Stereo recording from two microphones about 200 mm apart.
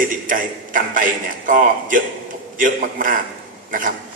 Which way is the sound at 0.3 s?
40° right (ahead or behind).